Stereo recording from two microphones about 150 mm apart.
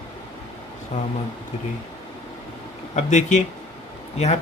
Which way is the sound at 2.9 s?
50° left (ahead or behind).